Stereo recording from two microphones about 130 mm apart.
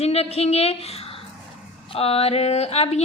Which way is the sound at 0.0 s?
50° left (ahead or behind).